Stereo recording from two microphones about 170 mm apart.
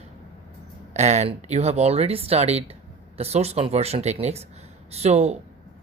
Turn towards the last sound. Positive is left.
turn(degrees=-40)  # may be behind; listen again after turning